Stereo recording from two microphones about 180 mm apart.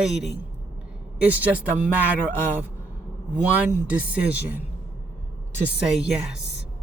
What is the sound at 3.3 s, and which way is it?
Speech, 5° right (ahead or behind).